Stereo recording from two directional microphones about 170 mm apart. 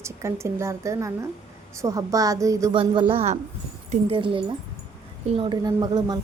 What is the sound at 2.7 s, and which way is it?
A woman's voice, 30° right (ahead or behind).